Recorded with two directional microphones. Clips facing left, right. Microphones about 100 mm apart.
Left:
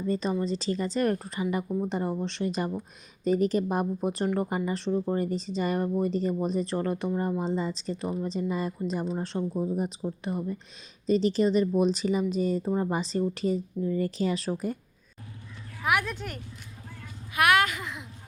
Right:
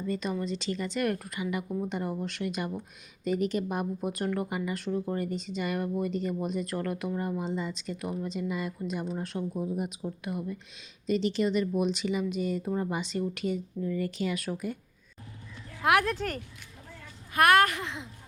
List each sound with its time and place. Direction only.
0.0 s speech: 30° left (ahead or behind)
1.6 s speech: 10° left (ahead or behind)
1.9 s speech: 30° left (ahead or behind)
16.0 s speech: 40° right (ahead or behind)
17.3 s speech: 45° right (ahead or behind)